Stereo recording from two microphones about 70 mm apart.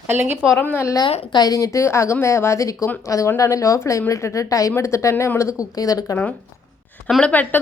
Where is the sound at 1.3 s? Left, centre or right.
Left.